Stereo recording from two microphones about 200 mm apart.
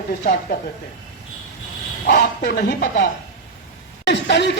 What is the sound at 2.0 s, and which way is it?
Speech, 45° left (ahead or behind).